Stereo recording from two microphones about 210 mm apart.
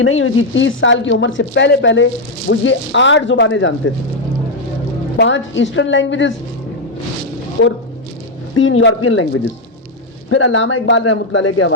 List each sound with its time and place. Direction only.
0.0 s speech: 70° left (ahead or behind)
5.1 s speech: 60° left (ahead or behind)
8.5 s speech: 70° left (ahead or behind)
10.2 s speech: 65° left (ahead or behind)